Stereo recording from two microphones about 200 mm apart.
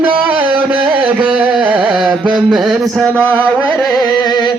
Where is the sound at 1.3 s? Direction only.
5° right (ahead or behind).